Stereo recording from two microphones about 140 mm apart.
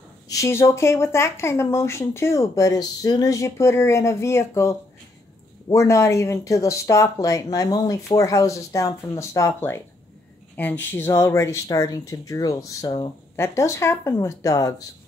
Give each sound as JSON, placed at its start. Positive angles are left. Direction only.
{"t": 0.3, "sound": "speech", "side_deg": 20}
{"t": 13.4, "sound": "speech", "side_deg": 20}